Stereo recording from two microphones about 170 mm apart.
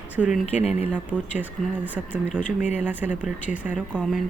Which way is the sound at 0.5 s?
40° left (ahead or behind).